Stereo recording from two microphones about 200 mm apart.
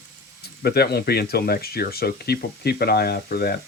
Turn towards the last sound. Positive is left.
turn(degrees=50)  # may be behind; listen again after turning